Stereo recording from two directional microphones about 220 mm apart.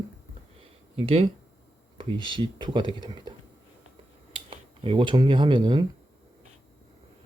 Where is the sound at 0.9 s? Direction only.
25° right (ahead or behind).